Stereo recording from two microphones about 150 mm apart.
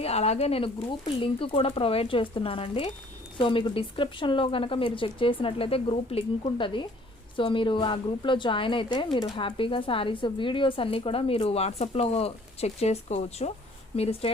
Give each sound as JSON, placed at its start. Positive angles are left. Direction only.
{"t": 0.0, "sound": "speech", "side_deg": 45}